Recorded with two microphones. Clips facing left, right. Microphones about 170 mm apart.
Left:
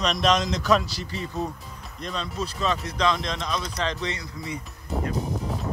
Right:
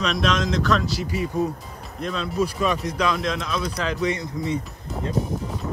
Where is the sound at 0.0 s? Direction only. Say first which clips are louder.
Even; centre (ahead or behind).